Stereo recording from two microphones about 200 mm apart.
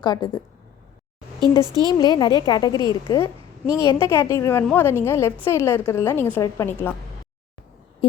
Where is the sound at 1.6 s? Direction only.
20° right (ahead or behind).